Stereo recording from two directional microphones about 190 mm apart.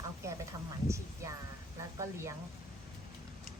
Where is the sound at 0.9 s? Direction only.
15° right (ahead or behind).